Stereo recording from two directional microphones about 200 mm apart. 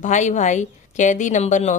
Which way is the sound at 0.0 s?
35° left (ahead or behind).